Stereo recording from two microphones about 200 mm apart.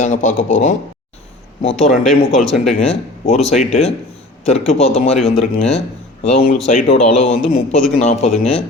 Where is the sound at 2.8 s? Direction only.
30° left (ahead or behind).